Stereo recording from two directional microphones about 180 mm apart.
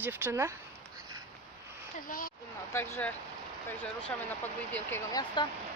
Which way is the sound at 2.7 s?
15° left (ahead or behind).